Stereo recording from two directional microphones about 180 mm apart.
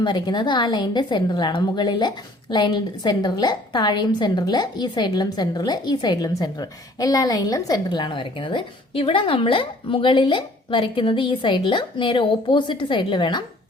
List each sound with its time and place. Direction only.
0.0 s a woman's voice: 25° left (ahead or behind)